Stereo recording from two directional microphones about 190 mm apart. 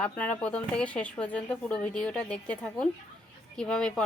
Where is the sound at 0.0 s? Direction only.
5° left (ahead or behind).